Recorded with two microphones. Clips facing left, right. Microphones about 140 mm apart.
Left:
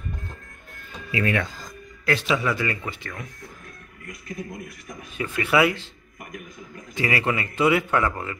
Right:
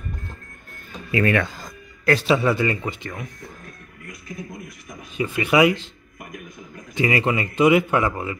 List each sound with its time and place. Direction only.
1.1 s speech: 60° right (ahead or behind)
2.0 s speech: 35° right (ahead or behind); by 3.3 s 20° right (ahead or behind)
5.1 s speech: 15° right (ahead or behind)
7.0 s speech: 20° right (ahead or behind)